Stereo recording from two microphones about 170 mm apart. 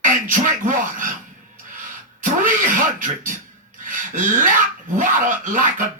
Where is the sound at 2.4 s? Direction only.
55° right (ahead or behind).